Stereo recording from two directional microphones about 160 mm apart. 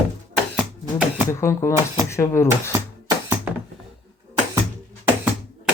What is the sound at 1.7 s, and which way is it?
Speech, 15° right (ahead or behind).